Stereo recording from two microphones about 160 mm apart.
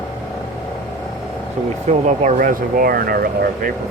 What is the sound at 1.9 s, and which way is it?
Speech, 50° right (ahead or behind).